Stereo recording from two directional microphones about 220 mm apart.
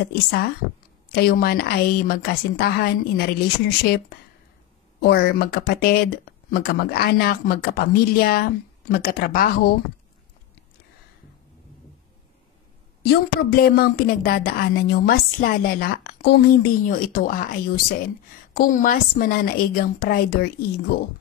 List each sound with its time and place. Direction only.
0.1 s a woman's voice: 45° left (ahead or behind)
13.1 s a woman's voice: 45° left (ahead or behind)